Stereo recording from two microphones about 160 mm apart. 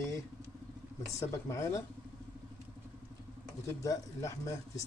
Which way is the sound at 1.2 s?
20° left (ahead or behind).